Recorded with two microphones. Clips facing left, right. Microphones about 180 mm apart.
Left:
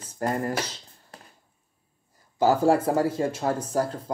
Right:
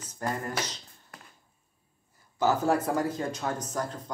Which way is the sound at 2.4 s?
30° left (ahead or behind).